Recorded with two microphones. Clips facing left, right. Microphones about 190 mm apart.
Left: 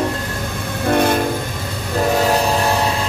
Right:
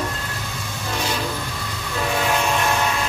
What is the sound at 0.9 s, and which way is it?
Train, 55° left (ahead or behind).